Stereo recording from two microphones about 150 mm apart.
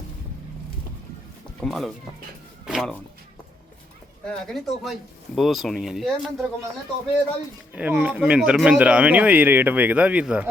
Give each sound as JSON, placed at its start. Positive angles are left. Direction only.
{"t": 1.6, "sound": "speech", "side_deg": 0}
{"t": 2.6, "sound": "a sound", "side_deg": -5}
{"t": 4.3, "sound": "speech", "side_deg": 0}
{"t": 7.7, "sound": "speech", "side_deg": -10}